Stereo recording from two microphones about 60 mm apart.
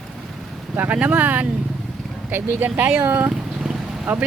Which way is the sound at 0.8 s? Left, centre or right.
Right.